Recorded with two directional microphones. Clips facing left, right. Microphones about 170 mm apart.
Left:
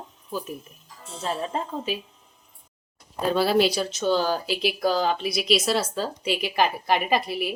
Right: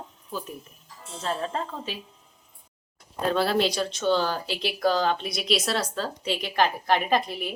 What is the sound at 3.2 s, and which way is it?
Speech, 5° left (ahead or behind).